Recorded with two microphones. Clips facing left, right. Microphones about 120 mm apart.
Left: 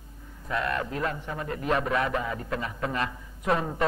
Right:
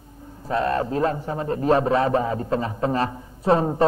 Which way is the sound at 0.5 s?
30° right (ahead or behind).